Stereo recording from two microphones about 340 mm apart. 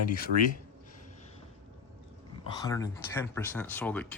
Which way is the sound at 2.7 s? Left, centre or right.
Centre.